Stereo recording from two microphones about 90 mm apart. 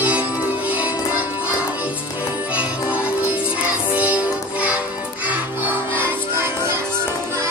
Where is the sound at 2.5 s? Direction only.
15° right (ahead or behind).